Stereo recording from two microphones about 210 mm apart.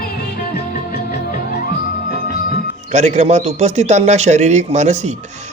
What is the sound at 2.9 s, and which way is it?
A man's voice, 35° right (ahead or behind).